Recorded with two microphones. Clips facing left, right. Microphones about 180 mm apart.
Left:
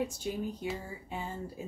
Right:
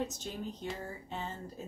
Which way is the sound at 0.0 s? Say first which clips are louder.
Left 4 dB; 10° left (ahead or behind).